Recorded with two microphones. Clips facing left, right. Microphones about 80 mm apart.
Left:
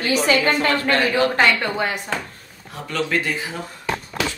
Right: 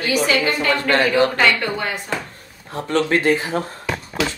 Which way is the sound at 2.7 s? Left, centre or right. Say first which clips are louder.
Right 4 dB; right.